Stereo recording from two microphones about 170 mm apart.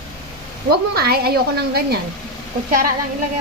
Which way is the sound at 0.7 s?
65° right (ahead or behind).